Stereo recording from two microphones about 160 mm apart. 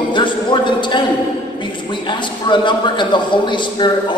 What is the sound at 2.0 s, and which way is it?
A man's voice, 30° left (ahead or behind).